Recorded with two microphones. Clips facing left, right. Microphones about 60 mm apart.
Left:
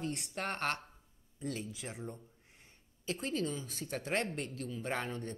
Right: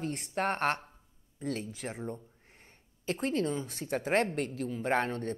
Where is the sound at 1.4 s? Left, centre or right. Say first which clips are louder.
Right 5 dB; right.